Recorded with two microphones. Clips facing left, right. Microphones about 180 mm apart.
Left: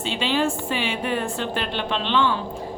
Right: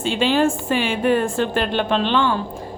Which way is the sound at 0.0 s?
45° right (ahead or behind).